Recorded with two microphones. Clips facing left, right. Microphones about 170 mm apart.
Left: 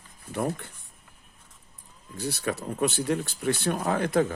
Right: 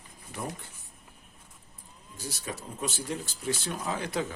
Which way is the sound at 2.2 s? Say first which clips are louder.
Left 8 dB; 65° left (ahead or behind).